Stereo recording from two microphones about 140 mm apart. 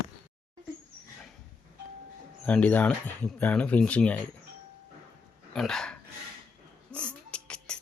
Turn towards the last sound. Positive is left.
turn(degrees=5)  # may be behind; listen again after turning